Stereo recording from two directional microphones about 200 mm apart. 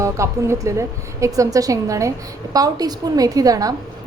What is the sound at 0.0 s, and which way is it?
A woman's voice, 15° right (ahead or behind).